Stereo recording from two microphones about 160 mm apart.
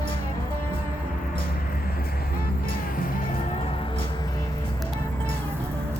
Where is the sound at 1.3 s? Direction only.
65° left (ahead or behind).